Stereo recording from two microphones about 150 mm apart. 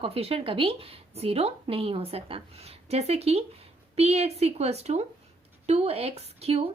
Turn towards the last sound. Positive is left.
turn(degrees=-40)  # may be behind; listen again after turning